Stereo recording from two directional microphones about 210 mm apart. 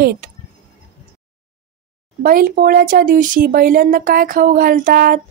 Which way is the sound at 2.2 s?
45° right (ahead or behind).